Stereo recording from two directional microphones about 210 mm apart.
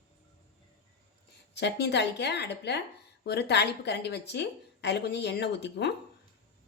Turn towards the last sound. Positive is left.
turn(degrees=55)  # may be behind; listen again after turning